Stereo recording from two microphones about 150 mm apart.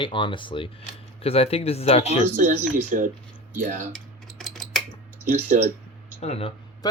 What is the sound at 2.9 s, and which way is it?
Speech, 60° right (ahead or behind).